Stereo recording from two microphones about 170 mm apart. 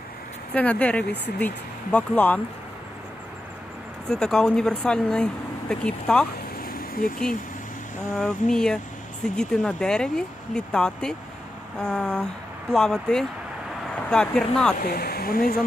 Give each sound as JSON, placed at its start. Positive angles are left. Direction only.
{"t": 0.5, "sound": "speech", "side_deg": 10}
{"t": 4.1, "sound": "speech", "side_deg": 5}
{"t": 6.6, "sound": "vehicle", "side_deg": 60}
{"t": 8.1, "sound": "speech", "side_deg": 5}
{"t": 14.8, "sound": "speech", "side_deg": 65}